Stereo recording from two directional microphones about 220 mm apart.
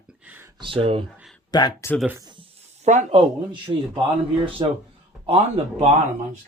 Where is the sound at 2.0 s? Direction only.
15° right (ahead or behind); by 3.2 s 30° right (ahead or behind).